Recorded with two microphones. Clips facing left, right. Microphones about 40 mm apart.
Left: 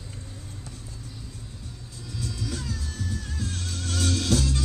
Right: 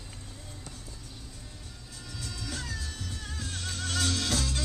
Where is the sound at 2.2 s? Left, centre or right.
Right.